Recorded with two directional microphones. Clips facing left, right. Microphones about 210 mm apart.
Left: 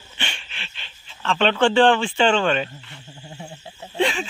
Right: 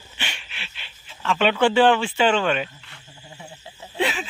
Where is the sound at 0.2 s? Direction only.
5° right (ahead or behind).